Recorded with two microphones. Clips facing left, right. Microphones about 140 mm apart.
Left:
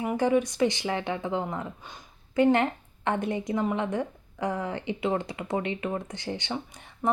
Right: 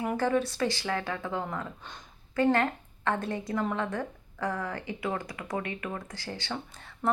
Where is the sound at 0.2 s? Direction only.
15° left (ahead or behind).